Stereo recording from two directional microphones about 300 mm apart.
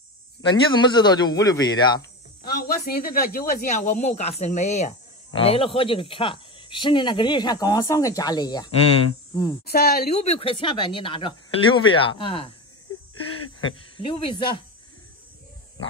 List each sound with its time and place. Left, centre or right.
0.4 s speech: centre
2.4 s speech: left; by 9.6 s centre
9.7 s speech: left
13.7 s speech: centre